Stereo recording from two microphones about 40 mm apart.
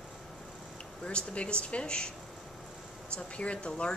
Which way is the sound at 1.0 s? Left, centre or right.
Left.